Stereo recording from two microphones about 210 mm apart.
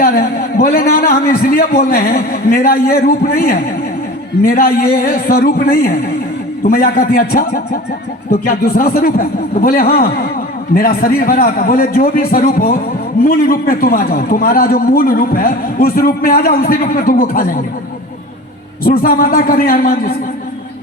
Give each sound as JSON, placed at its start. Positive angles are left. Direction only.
{"t": 0.0, "sound": "a man's voice", "side_deg": 45}
{"t": 18.8, "sound": "a man's voice", "side_deg": 45}